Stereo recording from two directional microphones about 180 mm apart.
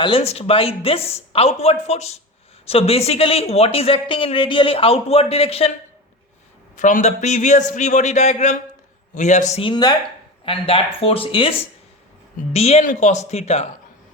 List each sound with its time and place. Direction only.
0.0 s speech: 30° left (ahead or behind)
6.7 s speech: 45° left (ahead or behind)
12.5 s speech: 35° left (ahead or behind)